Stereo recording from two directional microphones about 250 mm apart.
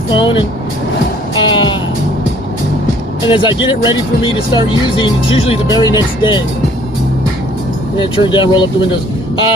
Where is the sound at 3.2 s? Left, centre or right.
Centre.